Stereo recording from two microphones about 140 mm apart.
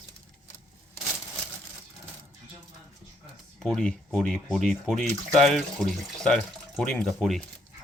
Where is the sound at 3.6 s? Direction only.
5° left (ahead or behind).